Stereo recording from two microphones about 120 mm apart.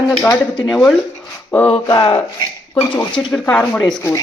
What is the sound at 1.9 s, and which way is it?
Speech, 40° left (ahead or behind).